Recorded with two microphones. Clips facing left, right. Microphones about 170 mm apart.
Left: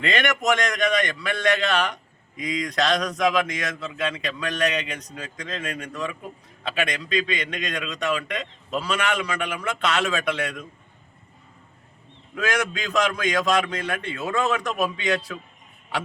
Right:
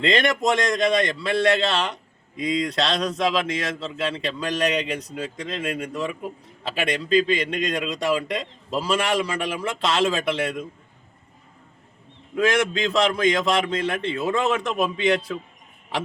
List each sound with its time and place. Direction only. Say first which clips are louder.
0.0 s speech: right 3 dB; 30° right (ahead or behind)
6.6 s a man's voice: right 2 dB; 30° right (ahead or behind)
12.3 s speech: right 5 dB; 25° right (ahead or behind)